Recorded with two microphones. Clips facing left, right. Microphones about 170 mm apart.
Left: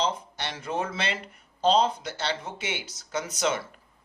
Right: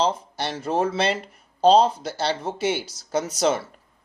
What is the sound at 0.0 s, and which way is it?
Speech, 35° right (ahead or behind).